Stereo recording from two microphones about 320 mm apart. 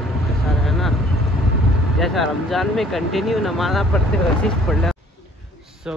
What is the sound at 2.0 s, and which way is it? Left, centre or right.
Speech, centre.